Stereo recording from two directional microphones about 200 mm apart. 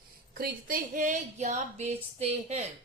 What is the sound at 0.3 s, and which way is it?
A woman's voice, 45° right (ahead or behind).